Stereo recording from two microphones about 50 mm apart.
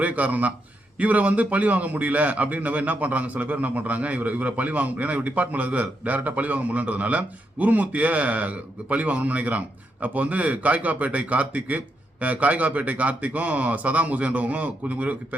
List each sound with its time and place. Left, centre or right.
0.0 s a man's voice: right